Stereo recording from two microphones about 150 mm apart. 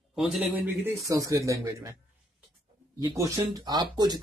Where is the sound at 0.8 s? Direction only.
20° right (ahead or behind).